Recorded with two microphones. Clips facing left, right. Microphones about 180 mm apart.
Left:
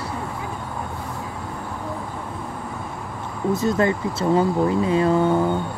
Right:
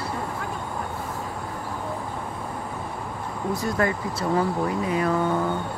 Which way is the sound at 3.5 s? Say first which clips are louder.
Left 5 dB; 25° left (ahead or behind).